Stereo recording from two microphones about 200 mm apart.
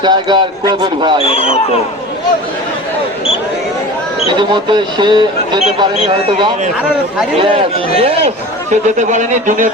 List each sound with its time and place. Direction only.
0.0 s a man's voice: 20° right (ahead or behind)
1.2 s speech: 30° left (ahead or behind)
4.3 s a man's voice: 25° right (ahead or behind); by 9.6 s 40° right (ahead or behind)